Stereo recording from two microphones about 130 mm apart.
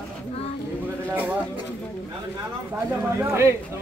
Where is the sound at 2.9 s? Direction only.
20° right (ahead or behind).